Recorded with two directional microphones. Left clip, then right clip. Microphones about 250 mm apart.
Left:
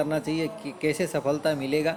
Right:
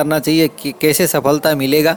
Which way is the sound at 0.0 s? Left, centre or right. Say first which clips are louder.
Right 13 dB; right.